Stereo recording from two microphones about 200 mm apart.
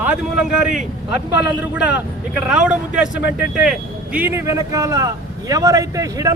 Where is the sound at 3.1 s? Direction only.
60° left (ahead or behind).